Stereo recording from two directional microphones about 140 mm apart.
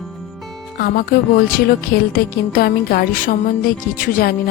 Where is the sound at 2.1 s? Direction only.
90° left.